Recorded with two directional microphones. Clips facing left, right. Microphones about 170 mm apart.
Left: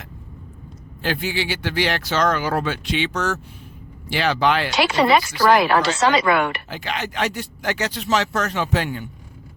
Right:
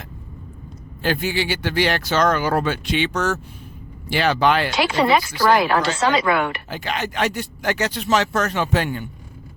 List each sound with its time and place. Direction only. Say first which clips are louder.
1.0 s speech: right 2 dB; 50° right (ahead or behind)
4.7 s speech: left 1 dB; 80° left
6.7 s speech: right 2 dB; 45° right (ahead or behind)